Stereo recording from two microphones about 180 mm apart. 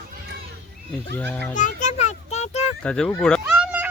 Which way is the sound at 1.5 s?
45° left (ahead or behind).